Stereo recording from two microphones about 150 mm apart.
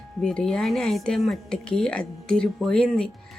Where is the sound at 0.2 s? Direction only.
5° left (ahead or behind).